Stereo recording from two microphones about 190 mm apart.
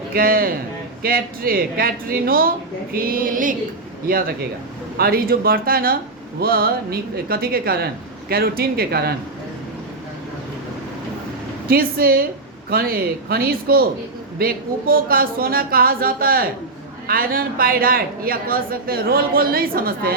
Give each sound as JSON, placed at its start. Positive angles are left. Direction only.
{"t": 0.1, "sound": "a man's voice", "side_deg": -50}
{"t": 11.7, "sound": "a man's voice", "side_deg": -50}